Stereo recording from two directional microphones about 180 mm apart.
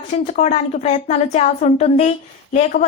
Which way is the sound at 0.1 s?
40° left (ahead or behind).